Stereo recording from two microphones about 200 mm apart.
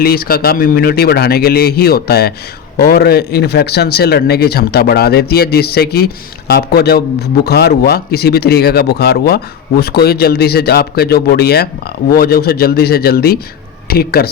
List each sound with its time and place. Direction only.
0.0 s a man's voice: 50° left (ahead or behind)